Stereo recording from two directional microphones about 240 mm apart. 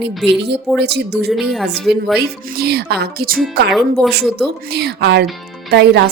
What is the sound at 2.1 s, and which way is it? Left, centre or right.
A woman's voice, right.